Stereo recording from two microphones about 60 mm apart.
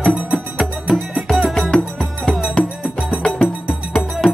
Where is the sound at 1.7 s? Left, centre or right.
Centre.